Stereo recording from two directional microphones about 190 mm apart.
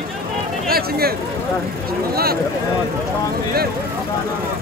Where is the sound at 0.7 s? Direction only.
55° right (ahead or behind).